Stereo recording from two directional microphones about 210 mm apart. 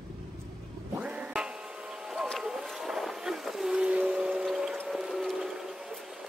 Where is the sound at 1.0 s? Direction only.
5° right (ahead or behind).